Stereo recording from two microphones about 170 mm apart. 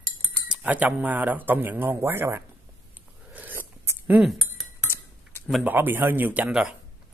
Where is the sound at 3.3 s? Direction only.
10° right (ahead or behind).